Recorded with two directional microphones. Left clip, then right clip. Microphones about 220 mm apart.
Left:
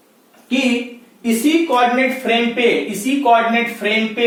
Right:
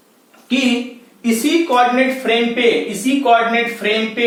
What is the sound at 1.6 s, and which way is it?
Speech, 15° right (ahead or behind).